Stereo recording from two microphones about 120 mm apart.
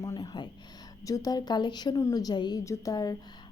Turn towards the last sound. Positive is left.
turn(degrees=30)  # may be behind; listen again after turning